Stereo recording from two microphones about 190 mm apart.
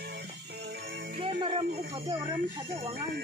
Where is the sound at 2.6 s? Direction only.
30° right (ahead or behind).